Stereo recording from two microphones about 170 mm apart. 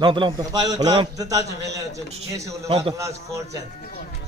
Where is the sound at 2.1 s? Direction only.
35° right (ahead or behind).